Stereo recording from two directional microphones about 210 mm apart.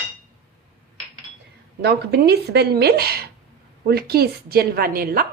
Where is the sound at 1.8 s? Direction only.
55° right (ahead or behind).